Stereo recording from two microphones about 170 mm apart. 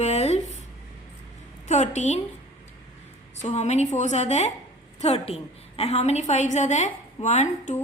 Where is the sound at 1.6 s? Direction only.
45° left (ahead or behind).